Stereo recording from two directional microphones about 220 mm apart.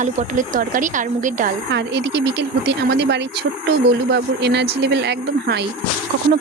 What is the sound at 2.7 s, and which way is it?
Speech, 50° right (ahead or behind).